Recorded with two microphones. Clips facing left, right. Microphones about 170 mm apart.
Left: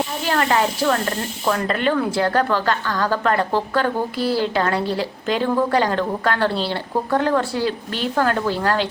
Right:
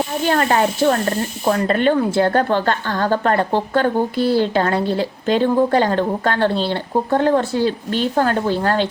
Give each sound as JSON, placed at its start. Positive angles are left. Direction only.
{"t": 0.3, "sound": "a woman's voice", "side_deg": -35}